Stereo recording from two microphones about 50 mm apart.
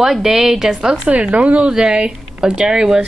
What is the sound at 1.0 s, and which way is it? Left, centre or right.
A woman's voice, right.